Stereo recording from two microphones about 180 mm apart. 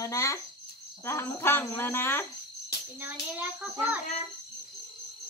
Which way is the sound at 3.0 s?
5° right (ahead or behind).